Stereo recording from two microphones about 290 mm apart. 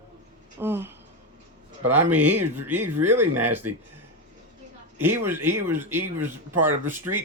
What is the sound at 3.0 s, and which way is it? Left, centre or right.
Speech, centre.